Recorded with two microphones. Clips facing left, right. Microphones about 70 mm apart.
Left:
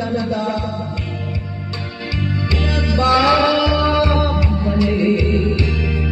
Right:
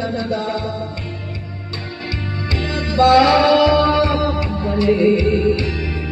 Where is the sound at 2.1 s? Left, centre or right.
Right.